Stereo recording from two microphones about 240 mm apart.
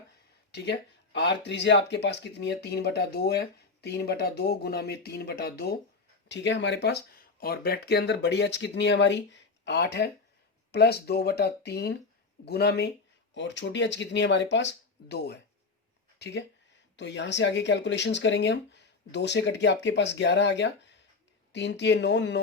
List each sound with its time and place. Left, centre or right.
0.5 s speech: left